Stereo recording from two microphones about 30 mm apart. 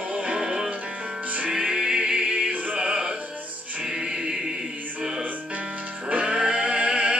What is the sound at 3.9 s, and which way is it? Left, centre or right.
Music, right.